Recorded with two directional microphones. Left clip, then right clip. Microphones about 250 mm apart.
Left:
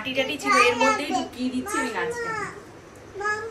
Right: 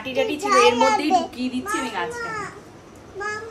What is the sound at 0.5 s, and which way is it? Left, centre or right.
A child's voice, centre.